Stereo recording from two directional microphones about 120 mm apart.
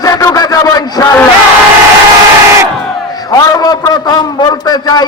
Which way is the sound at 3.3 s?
30° left (ahead or behind).